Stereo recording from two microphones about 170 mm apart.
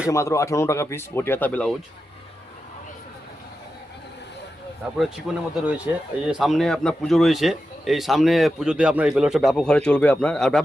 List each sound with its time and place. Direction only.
0.1 s speech: 15° left (ahead or behind)
5.3 s speech: 5° right (ahead or behind)